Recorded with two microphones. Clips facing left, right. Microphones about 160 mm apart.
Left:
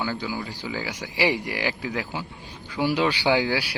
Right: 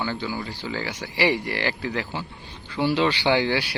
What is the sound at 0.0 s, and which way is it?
Speech, 10° left (ahead or behind).